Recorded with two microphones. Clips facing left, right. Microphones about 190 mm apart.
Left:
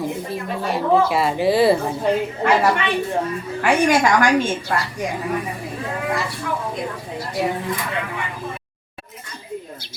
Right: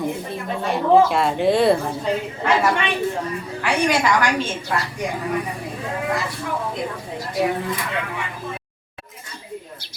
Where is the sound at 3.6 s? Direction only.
45° left (ahead or behind).